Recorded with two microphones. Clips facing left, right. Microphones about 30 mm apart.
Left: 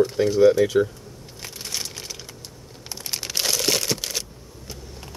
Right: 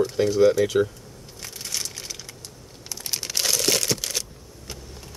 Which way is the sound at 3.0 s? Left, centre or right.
Centre.